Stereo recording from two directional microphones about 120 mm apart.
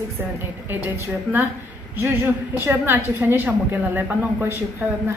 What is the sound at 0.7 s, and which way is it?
A woman's voice, 15° right (ahead or behind).